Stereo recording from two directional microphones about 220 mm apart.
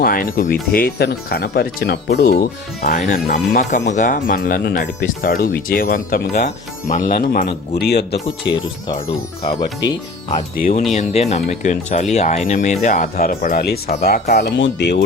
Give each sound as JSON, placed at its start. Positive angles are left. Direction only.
{"t": 0.0, "sound": "speech", "side_deg": 40}
{"t": 9.4, "sound": "speech", "side_deg": 25}